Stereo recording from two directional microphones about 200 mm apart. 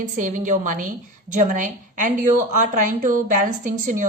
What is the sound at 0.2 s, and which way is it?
A woman's voice, 40° right (ahead or behind).